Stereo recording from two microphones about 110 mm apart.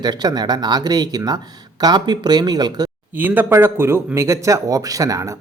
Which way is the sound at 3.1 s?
15° right (ahead or behind).